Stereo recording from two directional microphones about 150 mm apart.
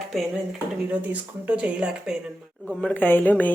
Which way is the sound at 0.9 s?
10° right (ahead or behind).